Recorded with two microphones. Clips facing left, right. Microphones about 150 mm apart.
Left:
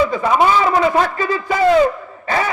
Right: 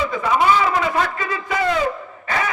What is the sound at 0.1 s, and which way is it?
A man's voice, 30° left (ahead or behind).